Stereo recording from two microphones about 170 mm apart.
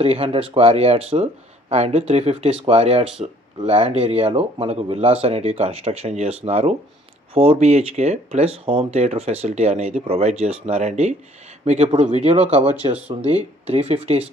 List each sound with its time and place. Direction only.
0.0 s speech: 35° right (ahead or behind)